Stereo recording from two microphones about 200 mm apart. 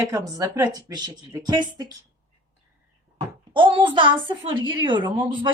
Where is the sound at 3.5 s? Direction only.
25° right (ahead or behind).